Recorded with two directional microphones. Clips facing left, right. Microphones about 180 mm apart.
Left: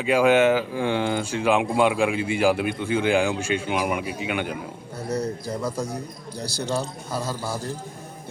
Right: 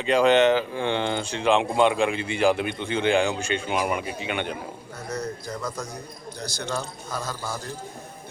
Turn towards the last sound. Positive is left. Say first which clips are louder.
# left 3 dB
turn(degrees=10)  # may be behind; listen again after turning